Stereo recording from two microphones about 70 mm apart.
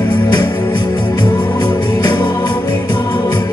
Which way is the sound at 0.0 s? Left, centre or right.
Left.